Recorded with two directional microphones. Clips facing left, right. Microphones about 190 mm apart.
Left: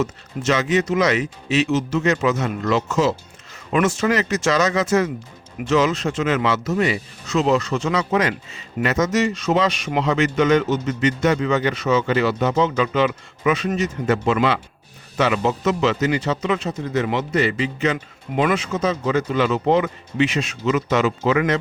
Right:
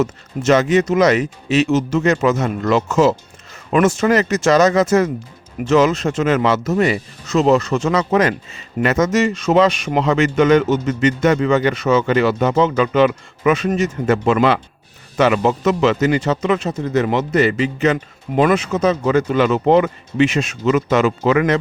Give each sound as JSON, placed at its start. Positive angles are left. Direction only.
{"t": 0.0, "sound": "a man's voice", "side_deg": -50}